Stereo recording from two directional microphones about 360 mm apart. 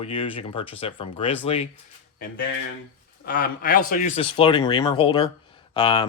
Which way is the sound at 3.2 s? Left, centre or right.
Left.